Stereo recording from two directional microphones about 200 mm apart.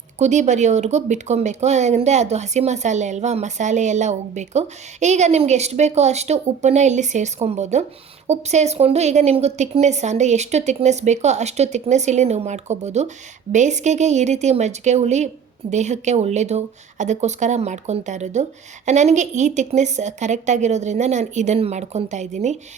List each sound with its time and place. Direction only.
0.2 s speech: 35° right (ahead or behind)